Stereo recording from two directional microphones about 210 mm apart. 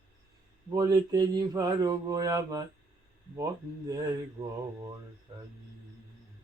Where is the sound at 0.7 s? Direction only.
15° right (ahead or behind).